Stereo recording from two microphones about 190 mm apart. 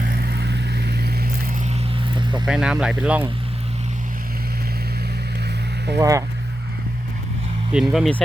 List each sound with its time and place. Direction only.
0.0 s vehicle: 55° right (ahead or behind)
2.5 s speech: 5° right (ahead or behind)
6.0 s speech: 15° right (ahead or behind)
7.7 s speech: 5° right (ahead or behind)